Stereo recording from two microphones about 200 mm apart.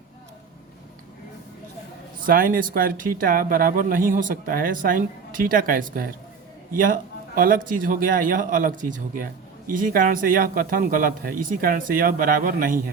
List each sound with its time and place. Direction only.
2.2 s speech: 45° right (ahead or behind)